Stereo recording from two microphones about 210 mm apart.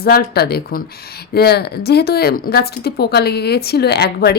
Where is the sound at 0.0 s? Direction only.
50° left (ahead or behind).